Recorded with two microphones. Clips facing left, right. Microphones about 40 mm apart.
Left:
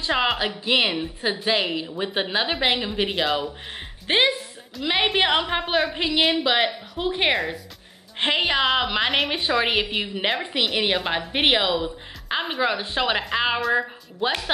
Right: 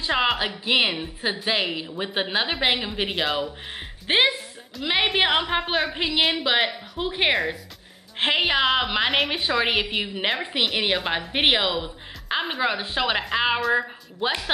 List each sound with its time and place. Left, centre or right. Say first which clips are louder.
0.0 s a woman's voice: even; centre